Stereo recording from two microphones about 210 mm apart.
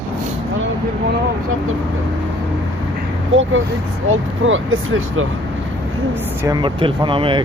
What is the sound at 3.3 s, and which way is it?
Speech, 65° right (ahead or behind).